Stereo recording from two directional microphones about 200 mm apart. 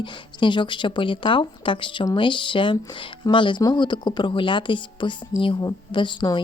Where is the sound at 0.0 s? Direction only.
25° left (ahead or behind).